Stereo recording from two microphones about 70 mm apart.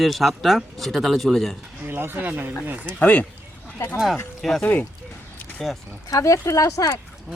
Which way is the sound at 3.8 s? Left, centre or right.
Left.